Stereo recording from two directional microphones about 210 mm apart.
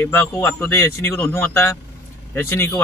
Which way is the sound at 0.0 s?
10° left (ahead or behind).